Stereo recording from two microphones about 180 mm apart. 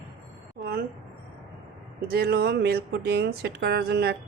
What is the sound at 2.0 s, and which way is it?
Speech, 60° right (ahead or behind).